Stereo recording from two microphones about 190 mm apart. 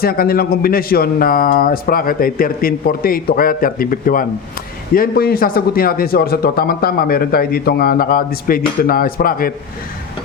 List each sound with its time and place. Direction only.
0.0 s speech: 50° left (ahead or behind)